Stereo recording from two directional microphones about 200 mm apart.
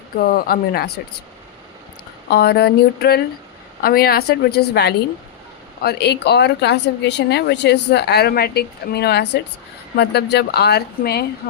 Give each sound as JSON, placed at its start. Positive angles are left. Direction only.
{"t": 0.2, "sound": "speech", "side_deg": 50}
{"t": 2.3, "sound": "speech", "side_deg": 55}